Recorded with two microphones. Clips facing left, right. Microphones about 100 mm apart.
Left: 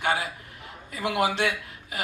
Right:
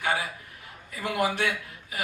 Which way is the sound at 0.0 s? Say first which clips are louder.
Left 2 dB; 25° left (ahead or behind).